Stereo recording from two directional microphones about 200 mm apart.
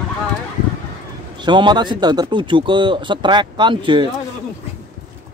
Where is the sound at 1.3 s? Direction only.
20° right (ahead or behind).